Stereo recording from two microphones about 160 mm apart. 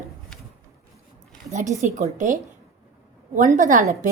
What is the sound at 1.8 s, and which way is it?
Speech, 50° right (ahead or behind).